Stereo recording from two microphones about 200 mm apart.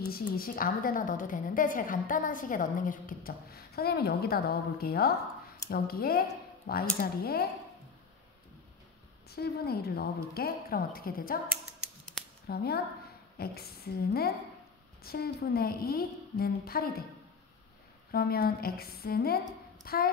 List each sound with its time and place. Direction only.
0.1 s a woman's voice: 50° left (ahead or behind)
9.3 s a woman's voice: 50° left (ahead or behind)
12.4 s a woman's voice: 50° left (ahead or behind)
18.1 s a woman's voice: 50° left (ahead or behind)